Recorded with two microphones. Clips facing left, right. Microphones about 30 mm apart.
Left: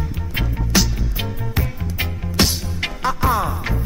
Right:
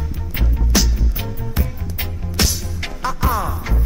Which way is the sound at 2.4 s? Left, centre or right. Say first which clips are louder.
Left 2 dB; left.